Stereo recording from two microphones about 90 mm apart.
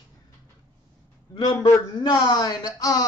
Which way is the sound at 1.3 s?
50° left (ahead or behind).